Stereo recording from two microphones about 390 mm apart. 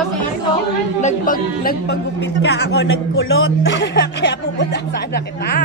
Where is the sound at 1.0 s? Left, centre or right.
Centre.